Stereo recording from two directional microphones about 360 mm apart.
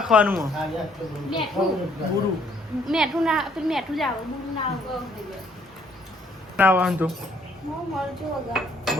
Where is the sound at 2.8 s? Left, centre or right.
Centre.